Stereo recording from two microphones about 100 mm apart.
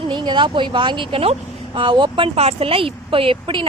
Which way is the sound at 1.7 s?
55° right (ahead or behind).